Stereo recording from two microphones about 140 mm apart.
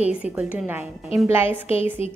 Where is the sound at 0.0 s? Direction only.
10° right (ahead or behind).